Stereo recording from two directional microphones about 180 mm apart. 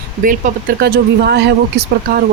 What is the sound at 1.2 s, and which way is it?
Speech, 65° right (ahead or behind).